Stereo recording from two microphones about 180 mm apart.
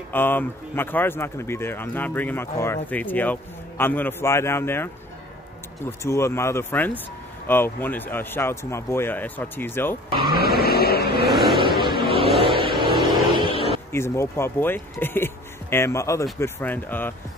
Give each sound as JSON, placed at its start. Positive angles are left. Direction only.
{"t": 0.1, "sound": "a man's voice", "side_deg": 10}
{"t": 5.9, "sound": "a man's voice", "side_deg": 15}
{"t": 10.3, "sound": "vehicle", "side_deg": 60}
{"t": 11.3, "sound": "vehicle", "side_deg": 0}
{"t": 12.3, "sound": "a sound", "side_deg": 0}
{"t": 13.9, "sound": "a man's voice", "side_deg": 15}